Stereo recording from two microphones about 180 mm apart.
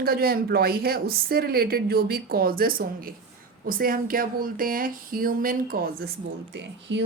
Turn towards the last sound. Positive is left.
turn(degrees=-70)  # may be behind; listen again after turning